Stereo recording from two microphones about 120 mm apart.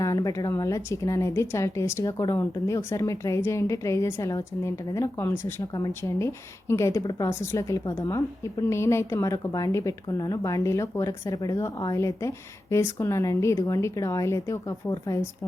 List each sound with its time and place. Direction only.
0.0 s a woman's voice: 30° left (ahead or behind)